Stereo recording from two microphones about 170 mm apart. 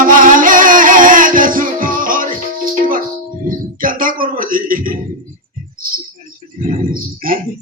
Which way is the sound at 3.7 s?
55° right (ahead or behind).